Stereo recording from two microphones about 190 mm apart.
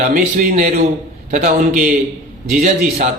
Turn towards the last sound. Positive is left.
turn(degrees=-40)  # may be behind; listen again after turning